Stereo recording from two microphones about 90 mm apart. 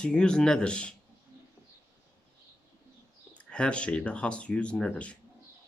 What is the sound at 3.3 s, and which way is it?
Speech, 10° left (ahead or behind).